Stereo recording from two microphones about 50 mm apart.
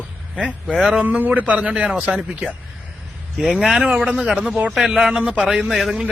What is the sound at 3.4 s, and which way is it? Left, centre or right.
Speech, centre.